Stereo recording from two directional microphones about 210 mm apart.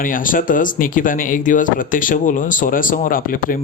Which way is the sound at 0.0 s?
40° left (ahead or behind).